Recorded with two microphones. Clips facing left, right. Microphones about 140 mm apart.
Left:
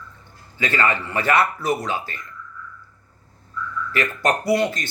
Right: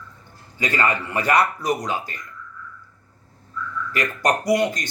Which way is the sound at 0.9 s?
15° right (ahead or behind).